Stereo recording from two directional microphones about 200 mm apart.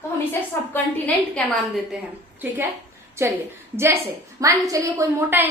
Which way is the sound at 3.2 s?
10° right (ahead or behind).